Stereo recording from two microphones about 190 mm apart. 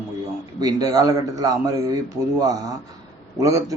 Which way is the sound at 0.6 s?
20° right (ahead or behind).